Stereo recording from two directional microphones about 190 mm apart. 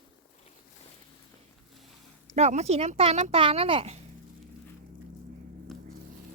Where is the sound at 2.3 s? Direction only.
35° right (ahead or behind).